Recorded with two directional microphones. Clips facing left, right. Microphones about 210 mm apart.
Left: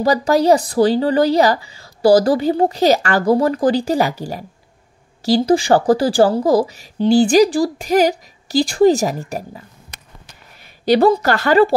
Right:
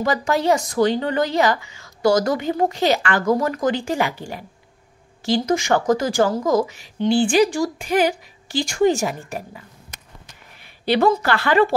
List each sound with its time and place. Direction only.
0.0 s a woman's voice: 35° left (ahead or behind)
10.6 s a woman's voice: 40° left (ahead or behind)